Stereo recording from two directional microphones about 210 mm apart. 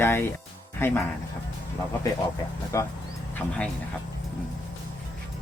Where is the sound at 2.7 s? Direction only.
15° left (ahead or behind).